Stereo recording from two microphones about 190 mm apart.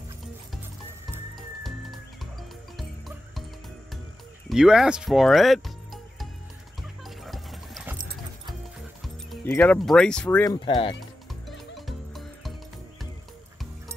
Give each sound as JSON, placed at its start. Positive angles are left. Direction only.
{"t": 1.3, "sound": "music", "side_deg": 0}
{"t": 4.5, "sound": "speech", "side_deg": 0}
{"t": 7.1, "sound": "music", "side_deg": 0}
{"t": 9.5, "sound": "speech", "side_deg": 5}
{"t": 10.4, "sound": "speech", "side_deg": 20}
{"t": 11.4, "sound": "music", "side_deg": 0}